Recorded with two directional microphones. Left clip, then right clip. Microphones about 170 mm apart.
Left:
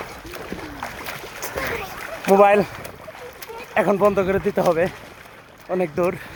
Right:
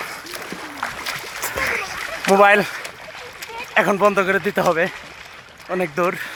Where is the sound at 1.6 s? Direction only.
20° right (ahead or behind).